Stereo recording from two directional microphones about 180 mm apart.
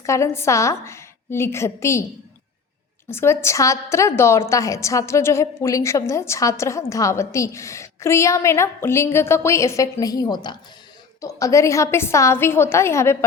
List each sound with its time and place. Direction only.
0.0 s a woman's voice: 15° left (ahead or behind)
3.1 s a woman's voice: 15° left (ahead or behind)